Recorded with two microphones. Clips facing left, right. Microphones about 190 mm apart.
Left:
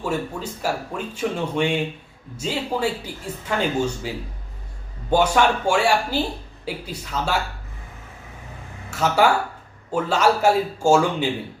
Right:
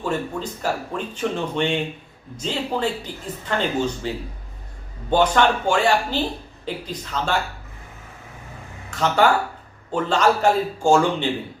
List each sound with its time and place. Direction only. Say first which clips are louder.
0.0 s speech: right 1 dB; 10° left (ahead or behind)
5.1 s speech: even; 10° left (ahead or behind)
8.9 s speech: even; 10° left (ahead or behind)